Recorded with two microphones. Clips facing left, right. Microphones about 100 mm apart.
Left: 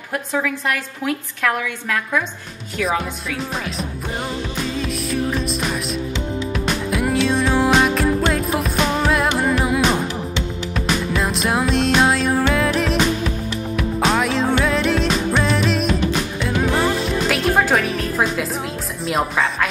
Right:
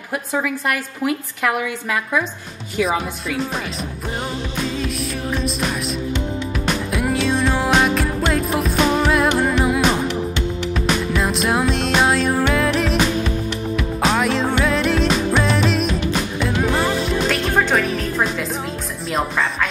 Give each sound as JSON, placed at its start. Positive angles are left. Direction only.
{"t": 0.1, "sound": "a woman's voice", "side_deg": -5}
{"t": 4.7, "sound": "music", "side_deg": 0}
{"t": 14.0, "sound": "music", "side_deg": 0}
{"t": 19.0, "sound": "a woman's voice", "side_deg": 0}